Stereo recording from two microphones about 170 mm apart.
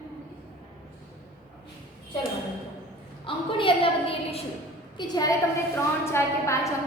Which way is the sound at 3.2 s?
30° left (ahead or behind).